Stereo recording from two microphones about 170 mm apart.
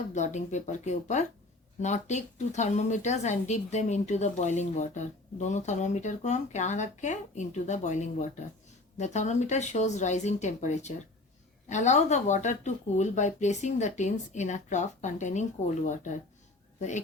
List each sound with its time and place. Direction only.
0.1 s speech: 45° left (ahead or behind)